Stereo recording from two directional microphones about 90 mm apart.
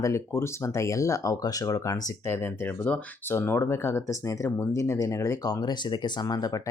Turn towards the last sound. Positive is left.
turn(degrees=45)  # may be behind; listen again after turning